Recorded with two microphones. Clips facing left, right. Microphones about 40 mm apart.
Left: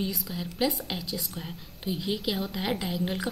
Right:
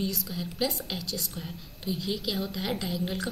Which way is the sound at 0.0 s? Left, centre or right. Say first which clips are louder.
Even; centre.